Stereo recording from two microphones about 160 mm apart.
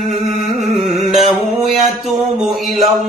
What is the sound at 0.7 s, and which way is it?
Music, 45° right (ahead or behind).